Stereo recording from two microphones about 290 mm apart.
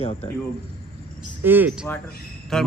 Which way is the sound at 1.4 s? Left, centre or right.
Centre.